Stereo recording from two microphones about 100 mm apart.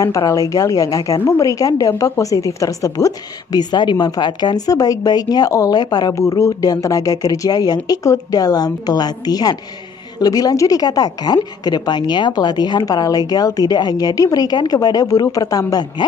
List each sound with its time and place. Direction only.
0.3 s a woman's voice: 35° left (ahead or behind)
6.1 s a woman's voice: 30° left (ahead or behind)